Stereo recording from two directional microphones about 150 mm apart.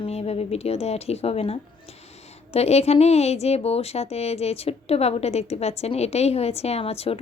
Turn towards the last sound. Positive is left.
turn(degrees=40)  # may be behind; listen again after turning